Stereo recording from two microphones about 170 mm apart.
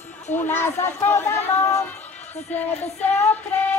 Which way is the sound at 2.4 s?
10° left (ahead or behind).